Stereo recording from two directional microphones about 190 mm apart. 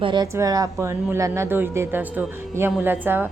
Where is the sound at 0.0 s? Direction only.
25° right (ahead or behind).